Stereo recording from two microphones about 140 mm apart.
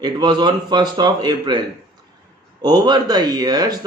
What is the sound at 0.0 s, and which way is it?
Speech, 30° right (ahead or behind).